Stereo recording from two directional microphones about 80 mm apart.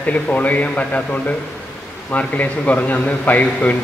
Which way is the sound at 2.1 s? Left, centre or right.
Centre.